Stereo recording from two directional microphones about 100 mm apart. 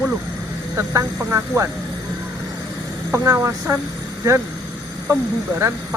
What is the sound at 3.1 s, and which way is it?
Speech, 30° right (ahead or behind).